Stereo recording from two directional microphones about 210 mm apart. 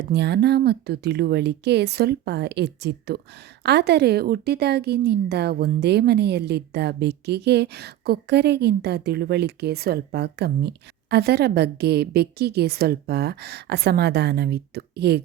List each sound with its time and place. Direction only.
0.1 s a woman's voice: 55° right (ahead or behind)